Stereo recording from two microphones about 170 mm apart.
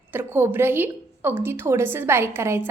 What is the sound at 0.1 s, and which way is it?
A woman's voice, 10° right (ahead or behind).